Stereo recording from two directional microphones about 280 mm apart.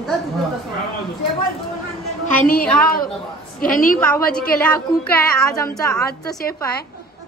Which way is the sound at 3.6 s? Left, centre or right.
Left.